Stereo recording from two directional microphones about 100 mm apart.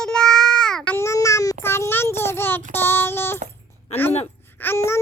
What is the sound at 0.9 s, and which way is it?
Child singing, 30° left (ahead or behind).